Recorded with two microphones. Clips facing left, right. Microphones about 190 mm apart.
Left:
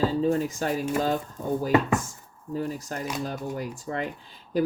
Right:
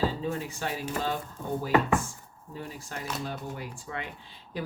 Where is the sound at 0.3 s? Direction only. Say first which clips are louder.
Left 8 dB; 40° left (ahead or behind).